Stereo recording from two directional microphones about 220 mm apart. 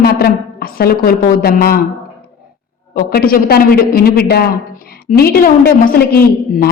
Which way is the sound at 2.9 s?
40° left (ahead or behind).